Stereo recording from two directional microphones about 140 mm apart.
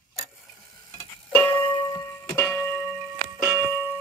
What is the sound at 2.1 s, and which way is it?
Music, 10° left (ahead or behind).